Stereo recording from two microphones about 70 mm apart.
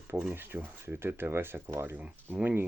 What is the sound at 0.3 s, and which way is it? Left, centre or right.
Speech, right.